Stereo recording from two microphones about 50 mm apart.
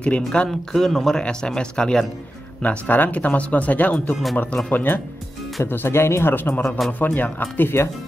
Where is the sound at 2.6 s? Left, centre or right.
Left.